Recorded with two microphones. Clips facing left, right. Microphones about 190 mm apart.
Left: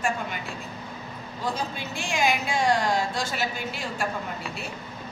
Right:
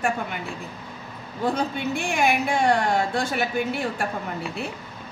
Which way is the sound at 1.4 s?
60° right (ahead or behind).